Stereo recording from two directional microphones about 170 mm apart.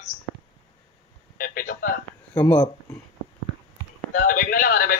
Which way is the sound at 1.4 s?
55° left (ahead or behind).